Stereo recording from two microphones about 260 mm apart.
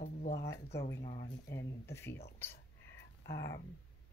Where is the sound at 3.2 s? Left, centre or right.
Left.